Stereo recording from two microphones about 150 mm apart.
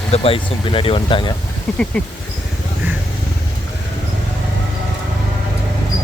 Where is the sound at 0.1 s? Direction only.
40° left (ahead or behind).